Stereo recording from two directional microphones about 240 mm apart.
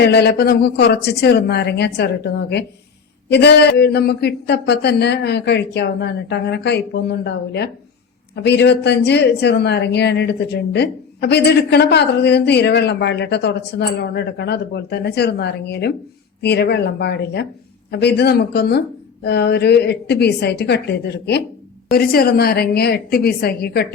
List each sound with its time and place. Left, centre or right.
0.0 s a woman's voice: left